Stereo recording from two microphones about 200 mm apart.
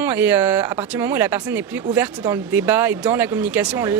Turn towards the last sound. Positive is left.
turn(degrees=-10)  # may be behind; listen again after turning